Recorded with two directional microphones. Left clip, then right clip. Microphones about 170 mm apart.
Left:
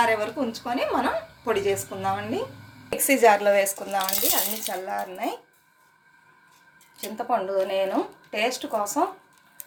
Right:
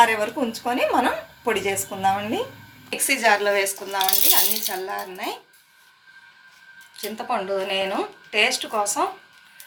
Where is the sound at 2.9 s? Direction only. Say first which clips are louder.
Left 1 dB; 85° left.